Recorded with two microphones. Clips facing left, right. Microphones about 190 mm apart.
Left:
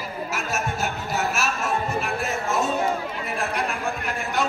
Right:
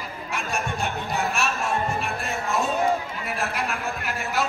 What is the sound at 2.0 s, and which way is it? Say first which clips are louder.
Music: left 2 dB; centre (ahead or behind).